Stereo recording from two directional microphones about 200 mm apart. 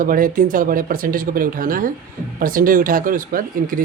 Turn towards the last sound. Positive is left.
turn(degrees=-45)  # may be behind; listen again after turning